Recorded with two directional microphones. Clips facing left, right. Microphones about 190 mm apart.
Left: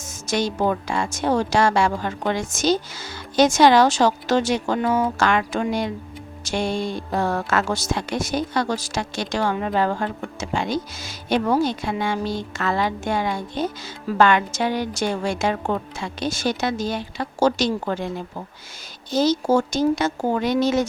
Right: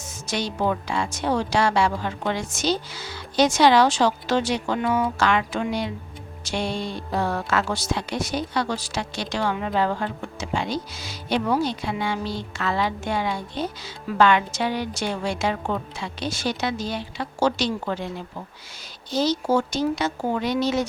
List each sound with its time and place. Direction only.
0.0 s speech: 45° left (ahead or behind)
19.1 s speech: 45° left (ahead or behind)